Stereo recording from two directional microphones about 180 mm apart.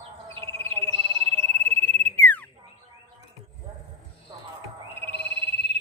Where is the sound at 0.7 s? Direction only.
30° right (ahead or behind).